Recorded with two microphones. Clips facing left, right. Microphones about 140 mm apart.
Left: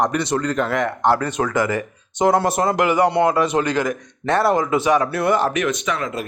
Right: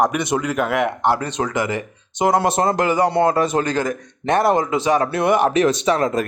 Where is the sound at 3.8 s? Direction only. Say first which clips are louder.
Right 1 dB; 20° right (ahead or behind).